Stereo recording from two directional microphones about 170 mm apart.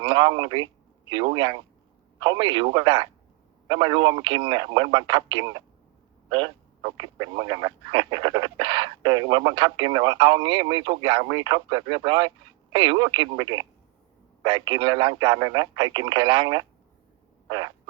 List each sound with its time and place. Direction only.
0.0 s speech: 25° right (ahead or behind)